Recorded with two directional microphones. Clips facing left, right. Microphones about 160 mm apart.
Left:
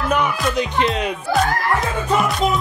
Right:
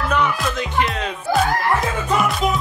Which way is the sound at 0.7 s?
20° left (ahead or behind).